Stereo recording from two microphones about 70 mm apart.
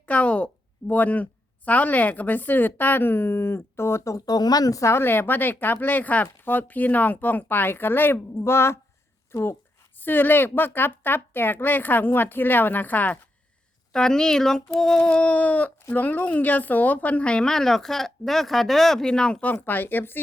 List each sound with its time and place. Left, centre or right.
0.0 s a woman's voice: centre; by 4.2 s left
4.3 s a woman's voice: left
5.0 s a woman's voice: left
10.0 s a woman's voice: left
13.9 s speech: centre
19.6 s a woman's voice: left